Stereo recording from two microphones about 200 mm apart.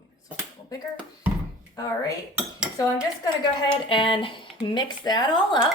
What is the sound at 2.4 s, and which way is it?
Dishes, 5° right (ahead or behind).